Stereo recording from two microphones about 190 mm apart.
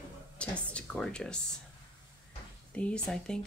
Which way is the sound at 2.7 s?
5° left (ahead or behind).